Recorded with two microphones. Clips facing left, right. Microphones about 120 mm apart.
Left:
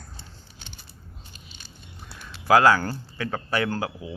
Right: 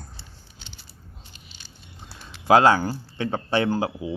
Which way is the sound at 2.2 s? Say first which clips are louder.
Right 1 dB; 25° right (ahead or behind).